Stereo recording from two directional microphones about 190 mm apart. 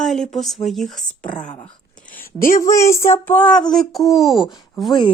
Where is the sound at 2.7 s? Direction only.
15° left (ahead or behind); by 4.4 s centre (ahead or behind).